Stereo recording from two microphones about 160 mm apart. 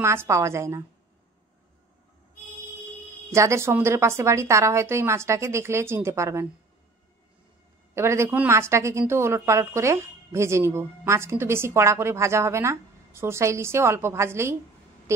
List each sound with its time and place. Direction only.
0.0 s a woman's voice: 15° right (ahead or behind)
3.3 s a woman's voice: 20° right (ahead or behind)
7.9 s a woman's voice: 15° right (ahead or behind)
15.1 s a sound: 15° right (ahead or behind)